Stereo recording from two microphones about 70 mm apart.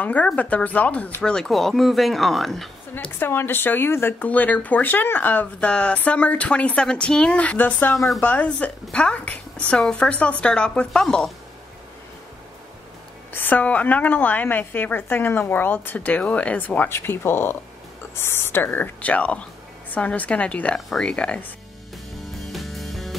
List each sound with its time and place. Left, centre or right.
0.0 s a woman's voice: left
1.3 s speech: centre
3.2 s speech: left
4.3 s a woman's voice: left
13.3 s a woman's voice: left
16.9 s a woman's voice: left; by 21.4 s centre
22.4 s music: centre